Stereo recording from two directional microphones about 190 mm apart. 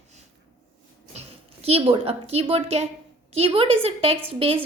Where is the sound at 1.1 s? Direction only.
35° right (ahead or behind).